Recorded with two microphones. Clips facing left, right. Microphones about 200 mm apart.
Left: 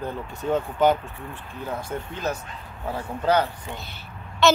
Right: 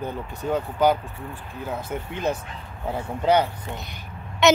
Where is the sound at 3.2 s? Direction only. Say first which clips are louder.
Right 2 dB; 20° right (ahead or behind).